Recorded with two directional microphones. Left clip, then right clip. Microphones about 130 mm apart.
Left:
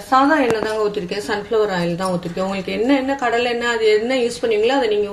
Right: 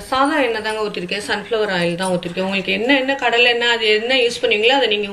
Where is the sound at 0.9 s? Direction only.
90° left.